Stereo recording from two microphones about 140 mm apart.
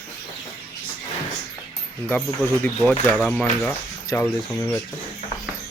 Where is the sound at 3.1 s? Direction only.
5° left (ahead or behind).